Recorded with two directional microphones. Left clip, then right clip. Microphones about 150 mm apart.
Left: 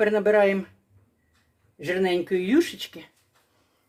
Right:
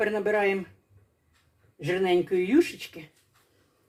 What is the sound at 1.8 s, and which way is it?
Speech, 65° left (ahead or behind).